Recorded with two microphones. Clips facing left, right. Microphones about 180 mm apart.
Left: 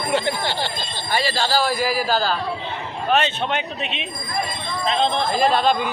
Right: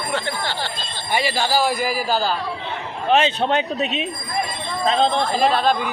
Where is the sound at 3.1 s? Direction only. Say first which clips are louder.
Right 3 dB; 35° right (ahead or behind).